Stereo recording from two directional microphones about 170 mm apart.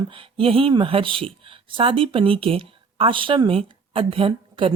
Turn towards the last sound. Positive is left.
turn(degrees=-30)  # may be behind; listen again after turning